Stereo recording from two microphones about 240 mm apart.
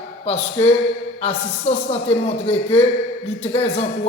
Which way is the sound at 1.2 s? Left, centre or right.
Left.